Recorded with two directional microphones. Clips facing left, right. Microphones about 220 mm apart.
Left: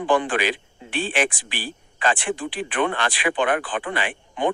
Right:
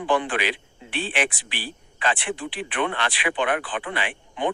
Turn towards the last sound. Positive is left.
turn(degrees=45)  # may be behind; listen again after turning